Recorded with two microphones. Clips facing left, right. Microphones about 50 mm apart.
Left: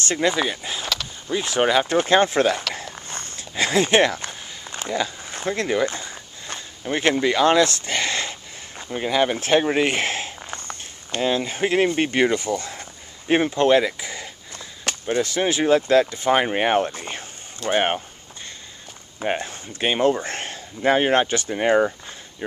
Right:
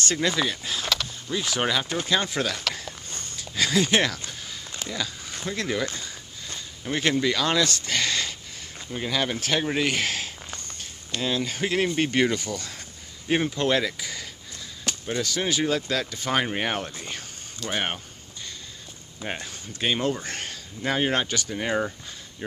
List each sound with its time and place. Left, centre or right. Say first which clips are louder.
0.1 s speech: left 5 dB; left
1.9 s speech: left 8 dB; left
4.3 s a sound: left 2 dB; left
7.0 s speech: left 5 dB; left
14.9 s chop: left 4 dB; left
15.2 s speech: left 4 dB; left
16.8 s a sound: left 6 dB; left
19.2 s speech: left 8 dB; left